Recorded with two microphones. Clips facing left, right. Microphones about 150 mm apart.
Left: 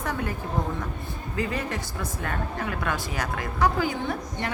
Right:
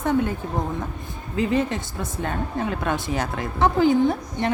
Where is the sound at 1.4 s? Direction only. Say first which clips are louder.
Right 7 dB; 25° right (ahead or behind).